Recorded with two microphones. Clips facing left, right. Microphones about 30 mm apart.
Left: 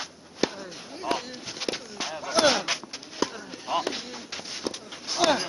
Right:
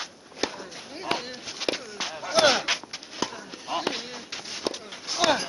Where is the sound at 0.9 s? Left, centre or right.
Centre.